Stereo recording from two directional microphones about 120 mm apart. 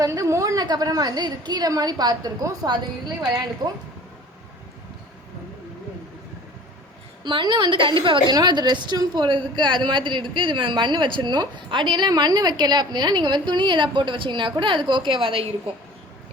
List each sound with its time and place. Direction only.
0.0 s a woman's voice: 25° right (ahead or behind)
7.3 s a woman's voice: 40° right (ahead or behind)